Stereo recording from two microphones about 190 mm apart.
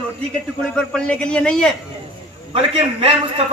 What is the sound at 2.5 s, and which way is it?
Speech, 30° right (ahead or behind).